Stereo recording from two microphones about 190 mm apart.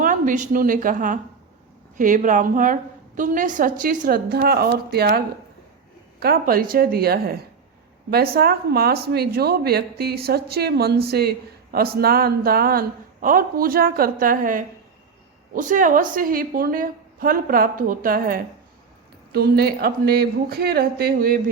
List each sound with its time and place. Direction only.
0.0 s a woman's voice: 45° right (ahead or behind)